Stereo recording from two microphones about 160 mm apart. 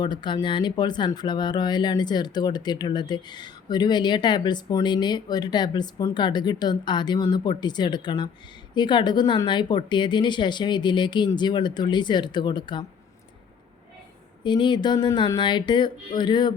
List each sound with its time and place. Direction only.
0.0 s speech: 30° left (ahead or behind)
14.4 s speech: 30° left (ahead or behind)